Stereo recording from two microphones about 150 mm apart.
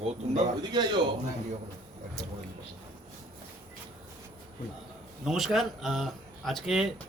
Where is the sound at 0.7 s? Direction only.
30° right (ahead or behind).